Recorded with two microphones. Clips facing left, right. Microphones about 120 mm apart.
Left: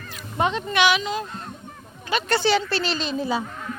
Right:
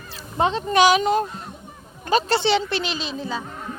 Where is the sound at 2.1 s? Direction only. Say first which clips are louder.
Right 2 dB; 35° right (ahead or behind); by 3.0 s 20° right (ahead or behind).